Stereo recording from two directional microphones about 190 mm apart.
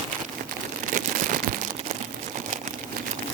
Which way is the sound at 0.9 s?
45° right (ahead or behind).